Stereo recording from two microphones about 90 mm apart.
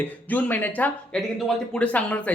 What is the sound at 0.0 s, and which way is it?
Speech, 20° left (ahead or behind).